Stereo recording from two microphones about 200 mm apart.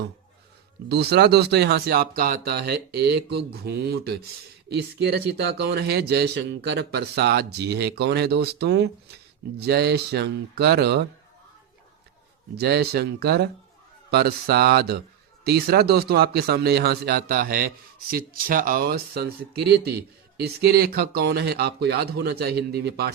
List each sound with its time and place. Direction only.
0.9 s speech: 55° right (ahead or behind)
12.5 s speech: 55° right (ahead or behind)